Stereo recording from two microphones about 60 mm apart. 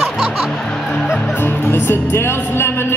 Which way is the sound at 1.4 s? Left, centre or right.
Left.